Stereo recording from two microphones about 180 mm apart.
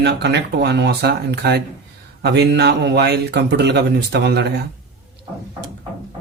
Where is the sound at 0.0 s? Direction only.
70° right (ahead or behind).